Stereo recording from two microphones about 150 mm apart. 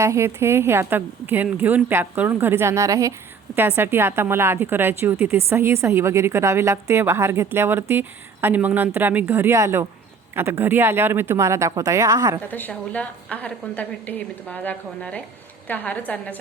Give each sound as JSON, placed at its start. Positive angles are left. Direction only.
{"t": 0.0, "sound": "a woman's voice", "side_deg": -20}
{"t": 12.5, "sound": "a woman's voice", "side_deg": 10}